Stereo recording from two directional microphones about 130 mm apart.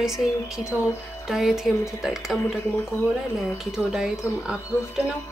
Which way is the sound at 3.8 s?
5° right (ahead or behind).